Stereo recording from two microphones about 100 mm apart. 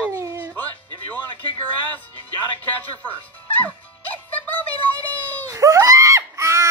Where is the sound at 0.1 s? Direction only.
30° right (ahead or behind).